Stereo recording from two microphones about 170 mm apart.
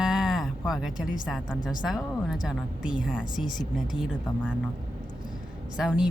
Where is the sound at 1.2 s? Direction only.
5° right (ahead or behind).